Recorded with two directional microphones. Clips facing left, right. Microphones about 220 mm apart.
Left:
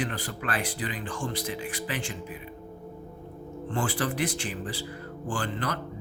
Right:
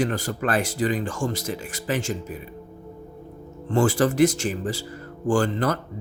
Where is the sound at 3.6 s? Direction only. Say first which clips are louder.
Right 9 dB; 45° right (ahead or behind).